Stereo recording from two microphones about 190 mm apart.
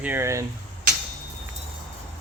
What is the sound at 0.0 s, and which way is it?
Speech, 10° right (ahead or behind).